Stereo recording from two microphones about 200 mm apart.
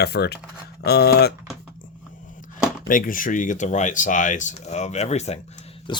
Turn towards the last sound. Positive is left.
turn(degrees=25)  # may be behind; listen again after turning